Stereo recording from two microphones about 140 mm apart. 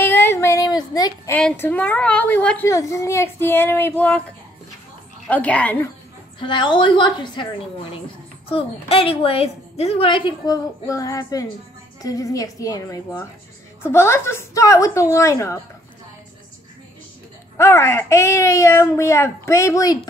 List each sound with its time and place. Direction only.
0.0 s a sound: 15° left (ahead or behind)
1.6 s speech: 10° left (ahead or behind)
5.3 s speech: 10° left (ahead or behind)
6.4 s a woman's voice: 35° left (ahead or behind)
8.5 s a woman's voice: 40° left (ahead or behind); by 15.6 s 20° left (ahead or behind)
17.6 s speech: 20° left (ahead or behind)